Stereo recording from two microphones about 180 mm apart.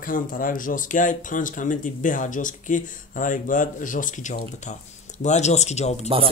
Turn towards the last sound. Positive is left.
turn(degrees=35)  # may be behind; listen again after turning